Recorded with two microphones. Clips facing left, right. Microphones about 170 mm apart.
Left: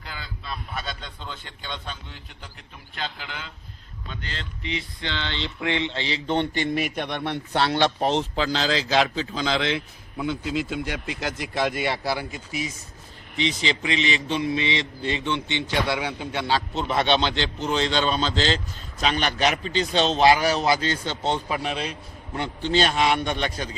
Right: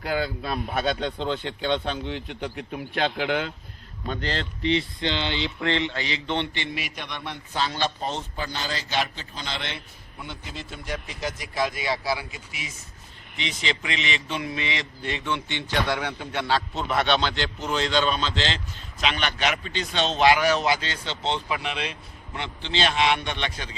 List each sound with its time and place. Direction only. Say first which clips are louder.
0.0 s speech: right 12 dB; 55° right (ahead or behind); by 4.8 s 35° right (ahead or behind)
4.9 s a sound: right 4 dB; 20° right (ahead or behind)
5.5 s a man's voice: left 2 dB; 15° left (ahead or behind); by 11.9 s 65° left (ahead or behind)
12.5 s a man's voice: left 9 dB; 40° left (ahead or behind)